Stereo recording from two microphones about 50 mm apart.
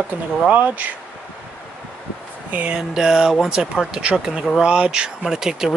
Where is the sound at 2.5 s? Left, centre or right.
Right.